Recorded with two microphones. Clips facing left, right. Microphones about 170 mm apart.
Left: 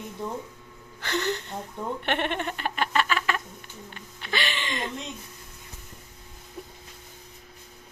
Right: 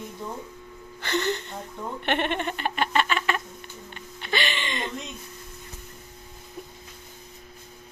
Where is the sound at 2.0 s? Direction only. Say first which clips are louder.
Right 3 dB; centre (ahead or behind).